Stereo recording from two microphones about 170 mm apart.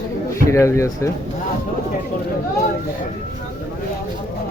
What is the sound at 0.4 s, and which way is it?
Speech, 15° left (ahead or behind).